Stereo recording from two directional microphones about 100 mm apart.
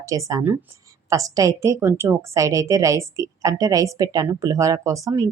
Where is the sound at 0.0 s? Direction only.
35° right (ahead or behind).